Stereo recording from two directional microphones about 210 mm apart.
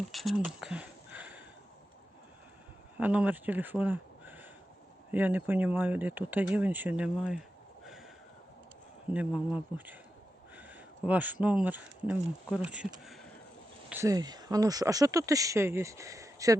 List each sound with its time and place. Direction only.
0.1 s a sound: centre (ahead or behind)
3.0 s speech: 5° right (ahead or behind)
9.7 s speech: 10° right (ahead or behind)
13.9 s speech: 15° right (ahead or behind)